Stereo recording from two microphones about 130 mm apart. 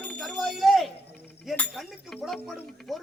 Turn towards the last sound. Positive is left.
turn(degrees=0)  # may be behind; listen again after turning